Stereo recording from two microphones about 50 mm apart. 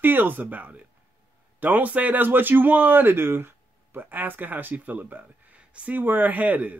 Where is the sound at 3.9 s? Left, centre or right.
Right.